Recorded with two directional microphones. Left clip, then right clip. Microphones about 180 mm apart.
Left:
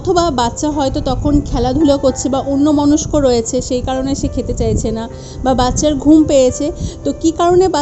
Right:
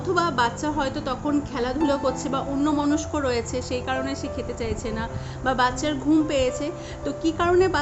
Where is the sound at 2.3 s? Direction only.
15° left (ahead or behind).